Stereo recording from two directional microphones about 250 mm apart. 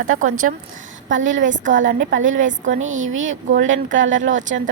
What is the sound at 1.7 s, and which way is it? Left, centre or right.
A woman's voice, right.